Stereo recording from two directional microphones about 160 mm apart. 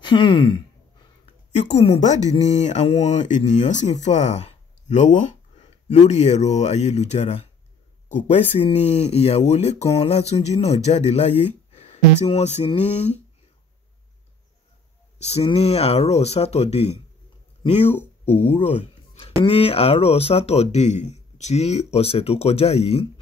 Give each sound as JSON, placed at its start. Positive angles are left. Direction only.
{"t": 0.0, "sound": "a man's voice", "side_deg": 30}
{"t": 1.2, "sound": "a sound", "side_deg": 45}
{"t": 1.8, "sound": "speech", "side_deg": 45}
{"t": 15.1, "sound": "speech", "side_deg": 40}
{"t": 17.9, "sound": "speech", "side_deg": 10}
{"t": 18.6, "sound": "speech", "side_deg": 45}